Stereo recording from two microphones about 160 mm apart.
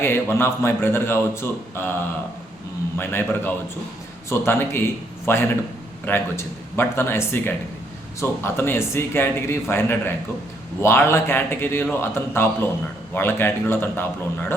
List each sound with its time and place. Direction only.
0.0 s a man's voice: 15° left (ahead or behind)
3.0 s a man's voice: 15° left (ahead or behind)